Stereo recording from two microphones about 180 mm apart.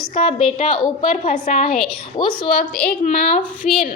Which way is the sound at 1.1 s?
40° left (ahead or behind).